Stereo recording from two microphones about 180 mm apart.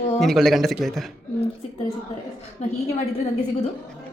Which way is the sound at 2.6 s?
40° left (ahead or behind).